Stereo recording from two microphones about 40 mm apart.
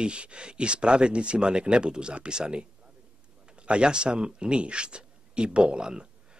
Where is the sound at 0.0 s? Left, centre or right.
Right.